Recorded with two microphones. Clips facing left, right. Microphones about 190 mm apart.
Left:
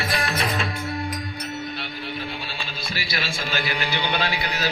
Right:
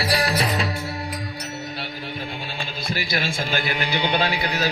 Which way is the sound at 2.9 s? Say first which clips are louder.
Right 4 dB; 50° right (ahead or behind).